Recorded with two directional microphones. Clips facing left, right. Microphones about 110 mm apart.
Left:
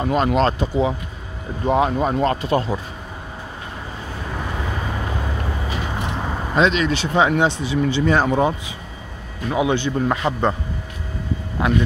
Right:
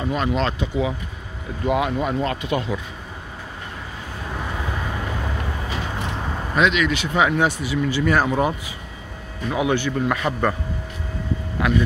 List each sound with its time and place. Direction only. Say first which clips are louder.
0.0 s speech: left 4 dB; 40° left (ahead or behind)
6.5 s speech: left 2 dB; 30° left (ahead or behind)